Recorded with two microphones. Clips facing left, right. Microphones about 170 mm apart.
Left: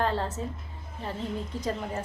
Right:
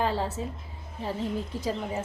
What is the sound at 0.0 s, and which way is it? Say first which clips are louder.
Speech: even; 10° right (ahead or behind).